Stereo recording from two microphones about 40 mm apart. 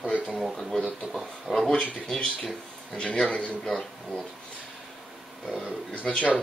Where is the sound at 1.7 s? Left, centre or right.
Centre.